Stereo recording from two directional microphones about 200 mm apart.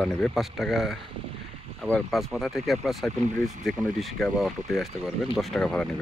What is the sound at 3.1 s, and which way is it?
Speech, 35° right (ahead or behind).